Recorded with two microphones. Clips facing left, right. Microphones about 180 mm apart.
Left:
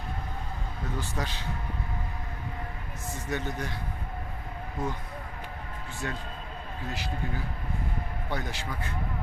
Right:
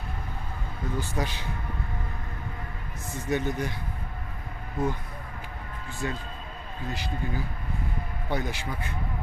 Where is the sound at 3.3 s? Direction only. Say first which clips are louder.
Right 5 dB; 15° right (ahead or behind).